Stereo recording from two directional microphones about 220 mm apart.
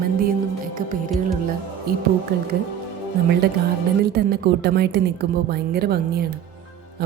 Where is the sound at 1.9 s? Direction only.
45° right (ahead or behind).